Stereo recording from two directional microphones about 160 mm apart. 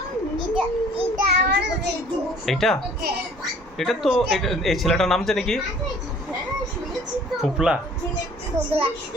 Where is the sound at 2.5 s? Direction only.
Centre (ahead or behind).